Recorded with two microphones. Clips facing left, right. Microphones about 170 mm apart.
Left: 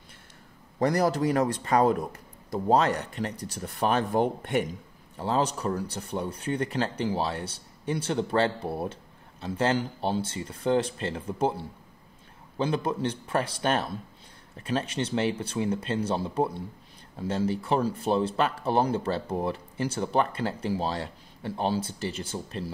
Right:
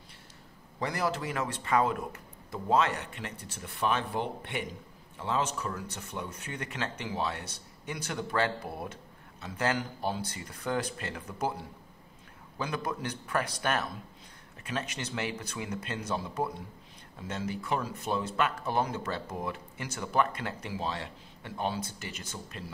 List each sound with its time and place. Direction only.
0.7 s speech: 40° left (ahead or behind)